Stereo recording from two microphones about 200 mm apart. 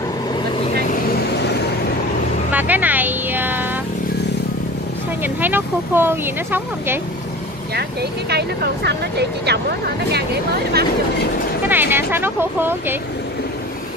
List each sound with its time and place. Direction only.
2.5 s vehicle: 10° right (ahead or behind)
5.2 s speech: 10° right (ahead or behind)
8.3 s speech: 55° right (ahead or behind)
11.6 s speech: 10° right (ahead or behind)